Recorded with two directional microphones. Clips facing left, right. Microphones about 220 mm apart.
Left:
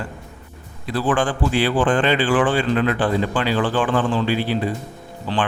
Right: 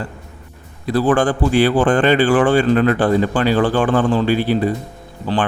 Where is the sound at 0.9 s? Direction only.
40° right (ahead or behind).